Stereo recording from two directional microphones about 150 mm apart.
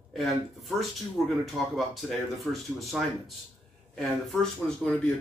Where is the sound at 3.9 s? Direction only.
5° left (ahead or behind).